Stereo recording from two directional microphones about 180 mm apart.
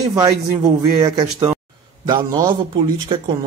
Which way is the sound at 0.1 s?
15° right (ahead or behind).